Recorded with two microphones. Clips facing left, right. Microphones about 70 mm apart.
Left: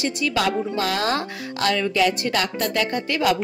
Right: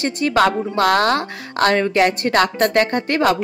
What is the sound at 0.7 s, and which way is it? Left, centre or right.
A woman's voice, right.